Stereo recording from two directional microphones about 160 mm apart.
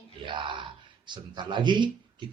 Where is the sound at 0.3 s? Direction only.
30° right (ahead or behind).